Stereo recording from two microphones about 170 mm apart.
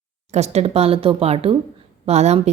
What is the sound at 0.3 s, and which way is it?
A woman's voice, 40° right (ahead or behind).